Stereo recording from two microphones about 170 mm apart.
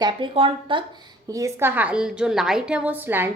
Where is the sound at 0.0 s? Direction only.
30° right (ahead or behind).